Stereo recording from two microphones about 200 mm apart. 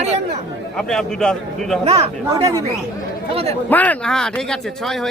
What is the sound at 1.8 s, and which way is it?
Speech, 25° right (ahead or behind).